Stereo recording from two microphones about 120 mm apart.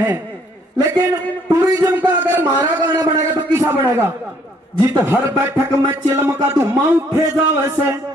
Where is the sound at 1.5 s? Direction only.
25° right (ahead or behind).